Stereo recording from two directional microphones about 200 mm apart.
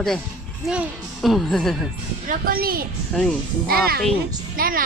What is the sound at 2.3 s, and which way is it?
A woman's voice, 45° right (ahead or behind).